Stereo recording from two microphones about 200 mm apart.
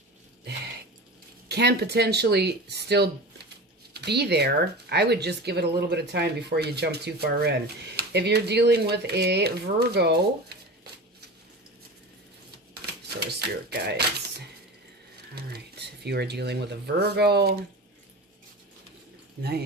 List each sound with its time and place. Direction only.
1.5 s speech: 55° right (ahead or behind)
13.7 s speech: 55° right (ahead or behind)
15.3 s speech: 55° right (ahead or behind)
19.4 s speech: 50° right (ahead or behind)